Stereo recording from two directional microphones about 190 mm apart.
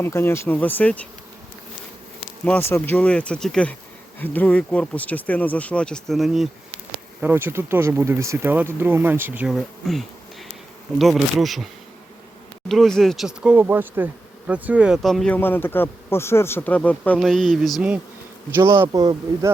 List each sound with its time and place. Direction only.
0.0 s speech: 10° left (ahead or behind)
2.4 s speech: 10° left (ahead or behind)
7.2 s speech: 10° right (ahead or behind)
10.9 s bee: centre (ahead or behind)
18.5 s speech: 15° right (ahead or behind)